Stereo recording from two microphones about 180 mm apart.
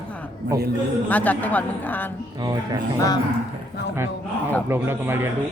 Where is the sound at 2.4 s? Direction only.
20° right (ahead or behind).